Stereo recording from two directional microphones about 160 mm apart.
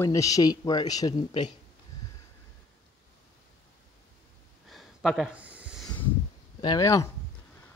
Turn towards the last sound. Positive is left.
turn(degrees=20)  # may be behind; listen again after turning